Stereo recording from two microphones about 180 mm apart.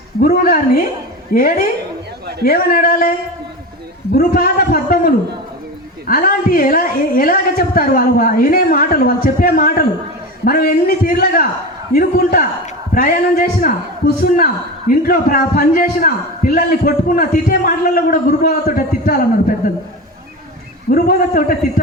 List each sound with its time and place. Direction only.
0.2 s a man's voice: 55° left (ahead or behind)
4.1 s a man's voice: 55° left (ahead or behind)
20.9 s a man's voice: 50° left (ahead or behind)